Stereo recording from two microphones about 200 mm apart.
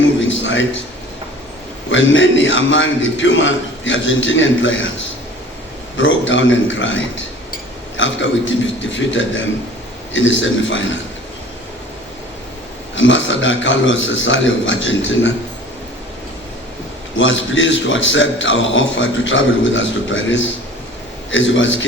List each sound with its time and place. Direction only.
0.3 s a sound: 70° left (ahead or behind)
1.9 s a man's voice: 70° left (ahead or behind)
13.0 s a man's voice: 70° left (ahead or behind)
17.2 s a man's voice: 70° left (ahead or behind)